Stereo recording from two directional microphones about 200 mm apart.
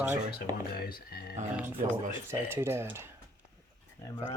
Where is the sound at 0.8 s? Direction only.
50° left (ahead or behind).